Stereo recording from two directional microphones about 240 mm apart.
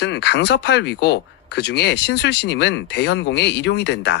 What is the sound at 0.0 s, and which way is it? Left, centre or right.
Speech, left.